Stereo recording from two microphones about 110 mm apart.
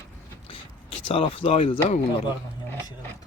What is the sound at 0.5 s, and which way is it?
Speech, 55° left (ahead or behind).